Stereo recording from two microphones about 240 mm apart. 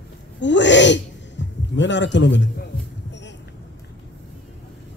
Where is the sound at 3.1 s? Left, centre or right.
Left.